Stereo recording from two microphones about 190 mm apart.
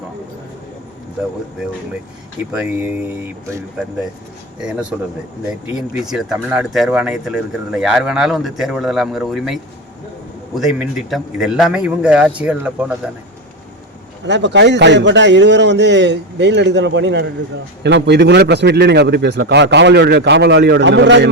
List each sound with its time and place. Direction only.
2.6 s speech: 10° right (ahead or behind)
4.6 s speech: 5° right (ahead or behind)
14.3 s a man's voice: 65° right (ahead or behind)